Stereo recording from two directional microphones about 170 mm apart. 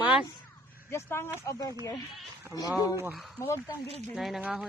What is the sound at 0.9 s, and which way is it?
Speech, 15° left (ahead or behind).